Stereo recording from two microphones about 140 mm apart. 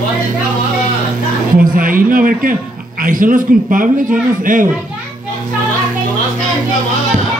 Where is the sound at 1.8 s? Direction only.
75° right (ahead or behind).